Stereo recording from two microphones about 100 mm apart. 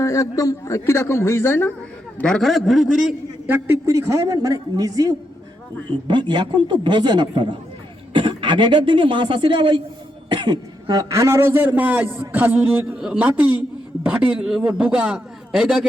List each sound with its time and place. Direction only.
0.0 s a man's voice: 35° left (ahead or behind)
2.1 s a man's voice: 10° left (ahead or behind)
3.4 s a man's voice: 20° right (ahead or behind)
3.8 s a man's voice: 30° right (ahead or behind)
6.1 s a man's voice: 50° right (ahead or behind); by 15.9 s 5° right (ahead or behind)